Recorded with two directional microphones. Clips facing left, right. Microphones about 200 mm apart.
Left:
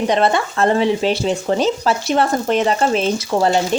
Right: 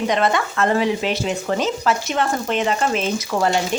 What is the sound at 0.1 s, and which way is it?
Speech, 30° left (ahead or behind).